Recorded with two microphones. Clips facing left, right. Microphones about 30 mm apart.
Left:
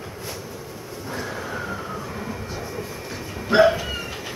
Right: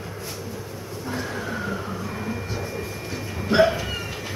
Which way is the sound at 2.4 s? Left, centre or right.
Centre.